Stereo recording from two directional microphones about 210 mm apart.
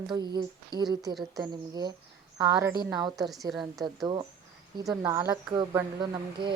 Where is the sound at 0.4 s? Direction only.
20° right (ahead or behind).